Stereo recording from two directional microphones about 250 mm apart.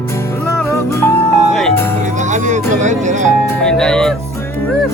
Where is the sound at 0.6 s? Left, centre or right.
Centre.